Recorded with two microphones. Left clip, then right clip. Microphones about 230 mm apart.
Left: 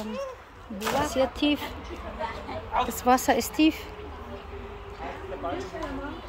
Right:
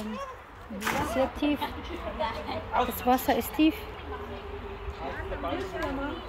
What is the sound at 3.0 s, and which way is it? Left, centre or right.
Speech, centre.